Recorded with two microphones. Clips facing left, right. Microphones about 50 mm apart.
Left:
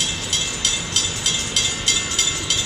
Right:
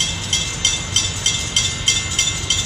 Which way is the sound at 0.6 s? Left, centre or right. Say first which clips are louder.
Right 4 dB; right.